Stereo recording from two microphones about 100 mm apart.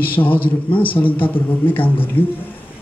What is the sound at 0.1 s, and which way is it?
A man's voice, 20° left (ahead or behind).